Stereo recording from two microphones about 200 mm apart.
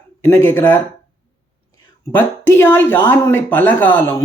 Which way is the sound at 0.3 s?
15° left (ahead or behind).